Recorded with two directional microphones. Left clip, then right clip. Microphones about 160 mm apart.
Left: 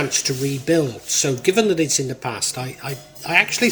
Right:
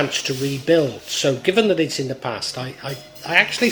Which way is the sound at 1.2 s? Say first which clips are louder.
Right 1 dB; 35° left (ahead or behind).